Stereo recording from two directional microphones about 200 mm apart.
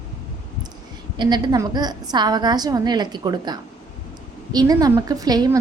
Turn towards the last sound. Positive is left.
turn(degrees=-20)  # may be behind; listen again after turning